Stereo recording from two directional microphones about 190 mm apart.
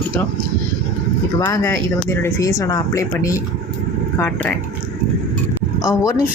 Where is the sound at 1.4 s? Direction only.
10° left (ahead or behind).